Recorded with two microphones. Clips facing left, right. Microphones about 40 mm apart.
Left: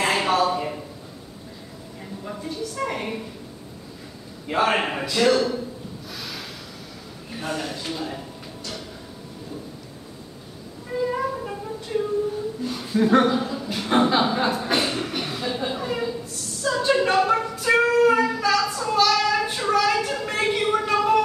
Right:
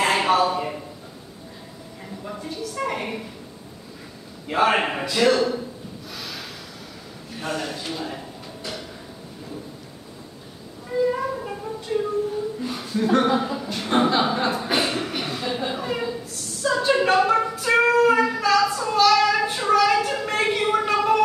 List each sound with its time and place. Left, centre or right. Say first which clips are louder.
0.0 s a sound: right 2 dB; centre
2.2 s a sound: left 1 dB; centre
4.5 s a man's voice: right 1 dB; centre
6.1 s snort: even; centre
7.3 s a man's voice: right 1 dB; centre
11.1 s music: right 1 dB; centre
12.9 s speech: left 2 dB; centre
13.3 s speech: right 2 dB; centre
13.6 s chuckle: left 1 dB; centre